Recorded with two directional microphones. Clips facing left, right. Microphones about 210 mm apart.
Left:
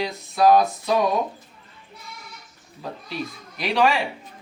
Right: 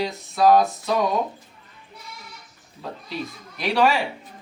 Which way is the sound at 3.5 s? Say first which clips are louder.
Even; centre (ahead or behind).